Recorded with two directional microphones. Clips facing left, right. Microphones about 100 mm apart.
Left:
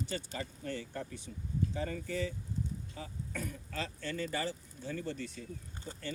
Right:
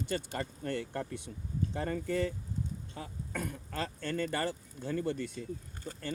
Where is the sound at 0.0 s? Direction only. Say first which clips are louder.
Right 4 dB; 55° right (ahead or behind).